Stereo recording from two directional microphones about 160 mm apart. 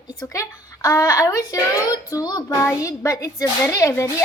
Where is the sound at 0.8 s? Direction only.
20° left (ahead or behind).